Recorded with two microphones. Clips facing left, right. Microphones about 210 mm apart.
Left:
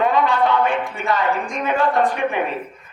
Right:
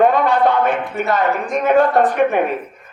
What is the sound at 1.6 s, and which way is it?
Speech, 50° right (ahead or behind).